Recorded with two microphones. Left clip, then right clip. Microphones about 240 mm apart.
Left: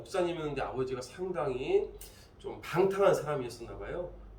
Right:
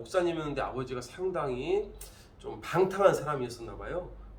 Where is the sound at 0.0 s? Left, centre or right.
Centre.